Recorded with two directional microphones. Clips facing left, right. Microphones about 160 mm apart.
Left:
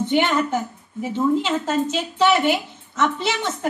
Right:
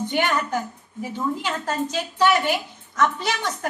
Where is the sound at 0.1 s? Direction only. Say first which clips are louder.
Left 4 dB; 20° left (ahead or behind).